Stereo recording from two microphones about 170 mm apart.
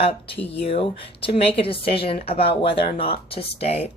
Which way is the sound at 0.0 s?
35° left (ahead or behind).